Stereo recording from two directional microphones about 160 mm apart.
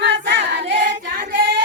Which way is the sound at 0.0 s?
90° right.